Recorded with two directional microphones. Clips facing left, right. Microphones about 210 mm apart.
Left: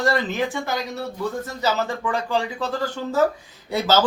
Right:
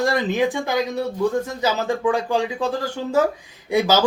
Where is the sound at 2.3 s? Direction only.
10° right (ahead or behind).